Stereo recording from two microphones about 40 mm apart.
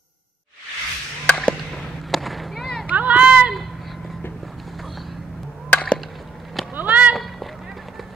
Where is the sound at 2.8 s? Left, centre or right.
Right.